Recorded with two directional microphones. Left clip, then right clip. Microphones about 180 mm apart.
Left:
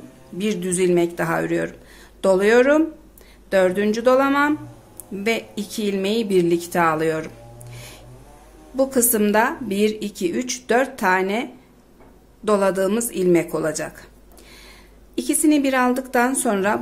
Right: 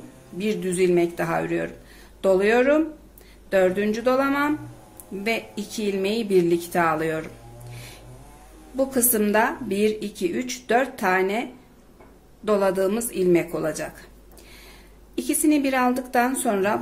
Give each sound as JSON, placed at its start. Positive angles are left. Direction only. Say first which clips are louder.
{"t": 0.4, "sound": "a woman's voice", "louder": "left 1 dB", "side_deg": 20}
{"t": 12.4, "sound": "a woman's voice", "louder": "left 2 dB", "side_deg": 15}
{"t": 15.1, "sound": "a woman's voice", "louder": "left 3 dB", "side_deg": 15}